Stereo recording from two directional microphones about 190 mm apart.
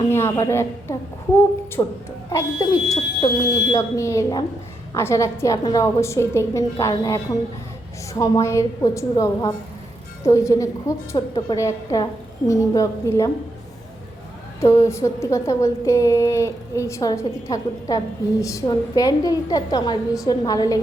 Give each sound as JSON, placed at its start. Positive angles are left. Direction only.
{"t": 0.1, "sound": "a woman's voice", "side_deg": 15}
{"t": 8.2, "sound": "a woman's voice", "side_deg": 15}
{"t": 14.6, "sound": "a woman's voice", "side_deg": 15}